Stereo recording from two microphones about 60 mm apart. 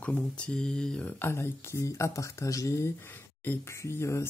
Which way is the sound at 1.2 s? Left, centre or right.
Left.